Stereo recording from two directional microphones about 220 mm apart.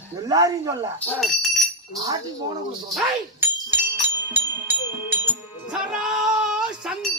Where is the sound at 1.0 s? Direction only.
Centre (ahead or behind).